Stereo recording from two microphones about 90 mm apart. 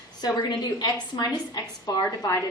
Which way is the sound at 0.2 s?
50° left (ahead or behind).